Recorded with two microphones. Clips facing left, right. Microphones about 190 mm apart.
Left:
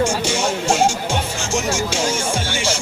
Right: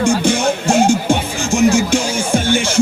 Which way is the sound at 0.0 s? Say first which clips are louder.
Right 5 dB; 55° right (ahead or behind).